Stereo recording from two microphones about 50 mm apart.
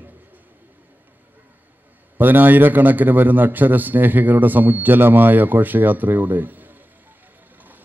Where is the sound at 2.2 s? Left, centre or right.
Right.